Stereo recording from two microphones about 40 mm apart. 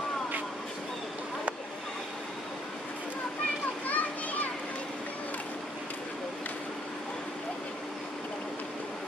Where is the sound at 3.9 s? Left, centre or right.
Left.